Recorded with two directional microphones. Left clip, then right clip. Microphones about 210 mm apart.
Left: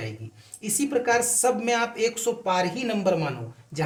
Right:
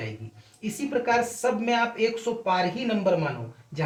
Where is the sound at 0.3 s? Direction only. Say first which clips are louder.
Left 7 dB; 45° left (ahead or behind).